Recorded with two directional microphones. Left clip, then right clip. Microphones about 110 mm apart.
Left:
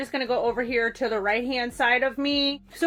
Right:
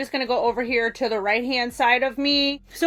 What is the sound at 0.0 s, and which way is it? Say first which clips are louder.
A woman's voice: right 3 dB; 30° right (ahead or behind).